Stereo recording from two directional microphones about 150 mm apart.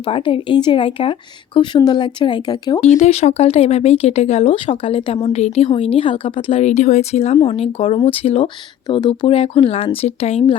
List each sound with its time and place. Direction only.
0.0 s speech: 35° left (ahead or behind)
2.8 s speech: 45° left (ahead or behind)